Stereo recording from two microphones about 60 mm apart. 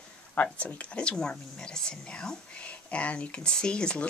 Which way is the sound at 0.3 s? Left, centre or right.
Left.